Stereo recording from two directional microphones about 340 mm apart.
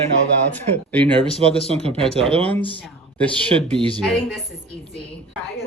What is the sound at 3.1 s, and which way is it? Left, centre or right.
A woman's voice, centre.